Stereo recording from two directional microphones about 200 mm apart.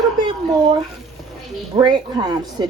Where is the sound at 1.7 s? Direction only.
20° right (ahead or behind).